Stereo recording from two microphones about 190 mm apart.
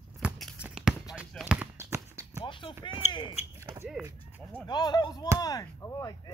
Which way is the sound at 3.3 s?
15° right (ahead or behind).